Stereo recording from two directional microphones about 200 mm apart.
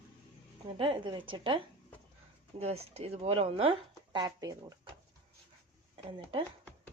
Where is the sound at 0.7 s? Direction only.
25° right (ahead or behind).